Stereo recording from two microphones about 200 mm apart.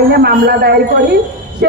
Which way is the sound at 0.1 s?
50° right (ahead or behind).